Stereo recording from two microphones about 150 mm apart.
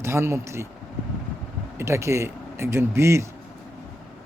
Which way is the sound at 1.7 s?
20° right (ahead or behind).